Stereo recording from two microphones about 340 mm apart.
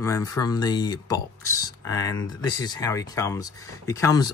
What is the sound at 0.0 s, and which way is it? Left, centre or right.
Speech, centre.